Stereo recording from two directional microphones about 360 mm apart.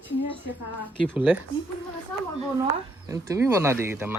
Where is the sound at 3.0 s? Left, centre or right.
Centre.